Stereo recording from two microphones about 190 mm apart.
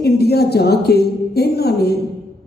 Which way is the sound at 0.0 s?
55° left (ahead or behind).